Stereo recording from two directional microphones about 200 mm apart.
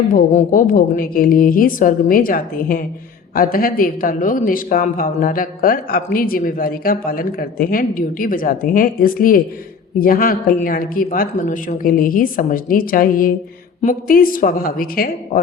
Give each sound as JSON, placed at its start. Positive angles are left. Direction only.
{"t": 0.1, "sound": "a woman's voice", "side_deg": 40}